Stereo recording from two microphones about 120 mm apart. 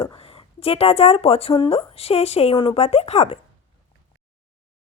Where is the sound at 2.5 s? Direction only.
50° left (ahead or behind).